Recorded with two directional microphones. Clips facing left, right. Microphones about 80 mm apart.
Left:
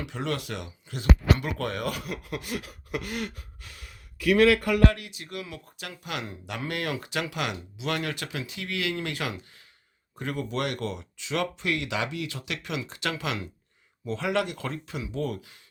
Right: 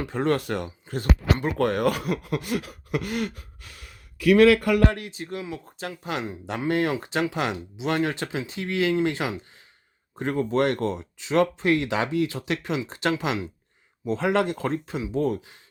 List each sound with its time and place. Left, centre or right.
0.0 s speech: right
1.5 s speech: right
4.2 s speech: right
4.9 s speech: right